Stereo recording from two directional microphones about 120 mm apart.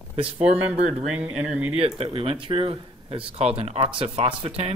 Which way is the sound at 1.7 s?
50° right (ahead or behind).